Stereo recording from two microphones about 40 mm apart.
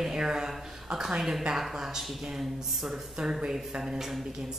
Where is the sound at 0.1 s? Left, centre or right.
Centre.